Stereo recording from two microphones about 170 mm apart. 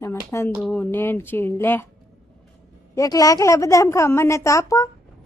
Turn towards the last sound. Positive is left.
turn(degrees=20)  # may be behind; listen again after turning